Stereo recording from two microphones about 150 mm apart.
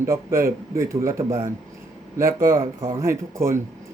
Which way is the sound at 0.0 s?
20° right (ahead or behind).